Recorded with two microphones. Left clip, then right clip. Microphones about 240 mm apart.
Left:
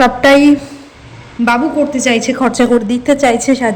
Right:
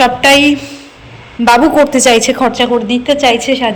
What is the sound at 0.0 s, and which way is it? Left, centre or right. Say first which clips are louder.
Speech: even; centre.